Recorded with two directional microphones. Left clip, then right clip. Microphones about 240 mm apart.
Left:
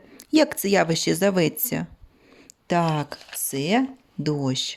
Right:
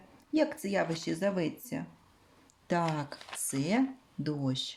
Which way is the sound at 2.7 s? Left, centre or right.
Left.